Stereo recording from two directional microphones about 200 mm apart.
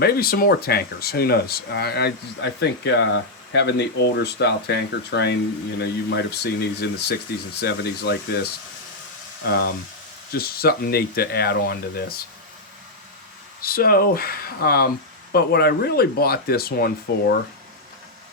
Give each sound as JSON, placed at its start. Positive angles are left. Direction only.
{"t": 0.0, "sound": "speech", "side_deg": 50}
{"t": 13.6, "sound": "speech", "side_deg": 50}